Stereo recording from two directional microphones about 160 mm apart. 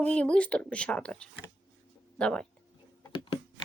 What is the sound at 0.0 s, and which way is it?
Speech, 10° left (ahead or behind).